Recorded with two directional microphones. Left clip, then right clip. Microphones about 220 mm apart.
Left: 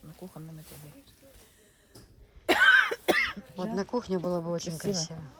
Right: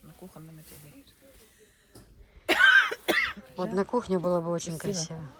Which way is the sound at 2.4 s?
50° left (ahead or behind).